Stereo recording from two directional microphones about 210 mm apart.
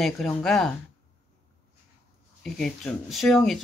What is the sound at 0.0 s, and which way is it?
Speech, centre (ahead or behind).